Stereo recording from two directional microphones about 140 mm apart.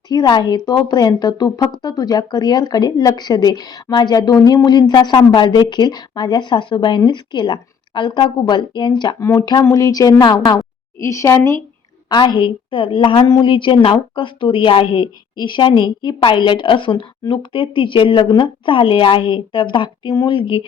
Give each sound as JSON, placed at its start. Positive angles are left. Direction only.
{"t": 0.1, "sound": "a woman's voice", "side_deg": 30}
{"t": 12.0, "sound": "speech", "side_deg": 35}